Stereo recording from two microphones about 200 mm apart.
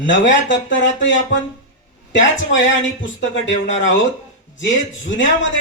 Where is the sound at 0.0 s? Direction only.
65° left (ahead or behind).